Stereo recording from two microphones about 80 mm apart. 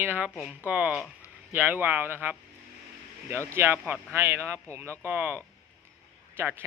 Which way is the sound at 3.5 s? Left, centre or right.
Right.